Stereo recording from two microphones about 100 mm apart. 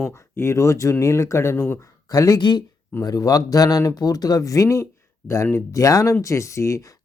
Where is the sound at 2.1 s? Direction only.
40° left (ahead or behind).